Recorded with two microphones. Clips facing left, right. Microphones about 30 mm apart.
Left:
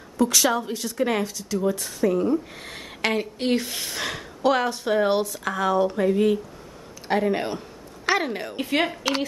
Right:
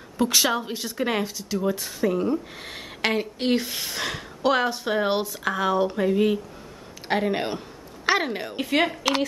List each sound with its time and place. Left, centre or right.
0.2 s a woman's voice: right; by 8.9 s centre